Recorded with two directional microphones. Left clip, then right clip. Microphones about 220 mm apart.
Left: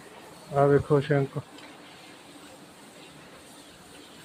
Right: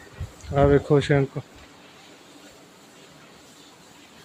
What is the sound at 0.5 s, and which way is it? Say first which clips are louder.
Speech: right 3 dB; 35° right (ahead or behind).